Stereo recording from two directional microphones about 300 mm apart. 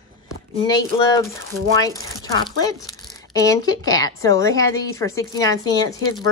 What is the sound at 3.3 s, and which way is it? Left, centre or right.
Speech, centre.